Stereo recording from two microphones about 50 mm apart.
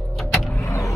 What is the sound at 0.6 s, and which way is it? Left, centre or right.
Vehicle, left.